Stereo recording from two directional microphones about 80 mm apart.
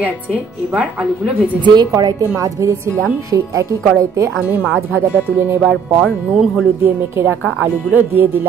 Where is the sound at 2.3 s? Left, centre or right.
Right.